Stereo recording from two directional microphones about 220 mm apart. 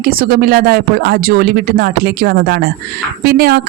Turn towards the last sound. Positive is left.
turn(degrees=-45)  # may be behind; listen again after turning